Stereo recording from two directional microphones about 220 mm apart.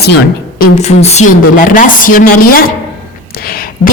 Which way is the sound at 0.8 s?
30° left (ahead or behind).